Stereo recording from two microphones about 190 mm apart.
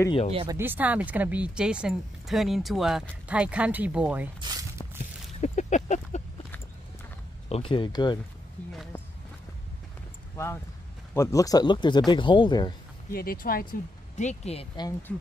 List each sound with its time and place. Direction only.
0.3 s speech: 30° right (ahead or behind)
0.6 s speech: 10° right (ahead or behind)
4.4 s speech: 20° right (ahead or behind)
5.4 s a sound: 40° left (ahead or behind)
7.4 s speech: 30° left (ahead or behind)
10.3 s speech: 15° left (ahead or behind)
13.1 s speech: 50° left (ahead or behind); by 14.9 s 30° left (ahead or behind)
15.1 s speech: 5° left (ahead or behind)